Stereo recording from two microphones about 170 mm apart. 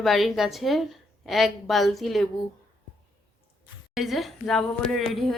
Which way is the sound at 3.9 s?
Centre (ahead or behind).